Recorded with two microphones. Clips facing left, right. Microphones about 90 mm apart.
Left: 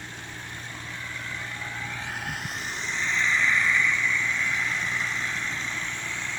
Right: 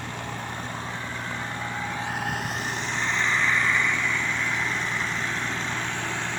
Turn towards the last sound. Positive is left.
turn(degrees=-60)  # may be behind; listen again after turning